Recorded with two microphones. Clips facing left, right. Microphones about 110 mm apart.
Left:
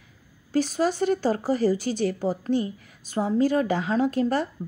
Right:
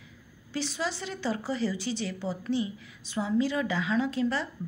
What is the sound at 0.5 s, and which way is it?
Speech, 45° left (ahead or behind).